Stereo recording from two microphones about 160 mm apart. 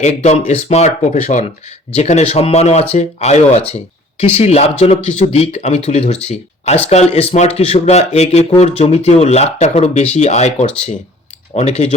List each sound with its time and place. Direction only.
0.0 s speech: 45° left (ahead or behind)